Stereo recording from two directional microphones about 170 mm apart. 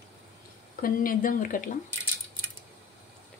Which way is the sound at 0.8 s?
55° left (ahead or behind).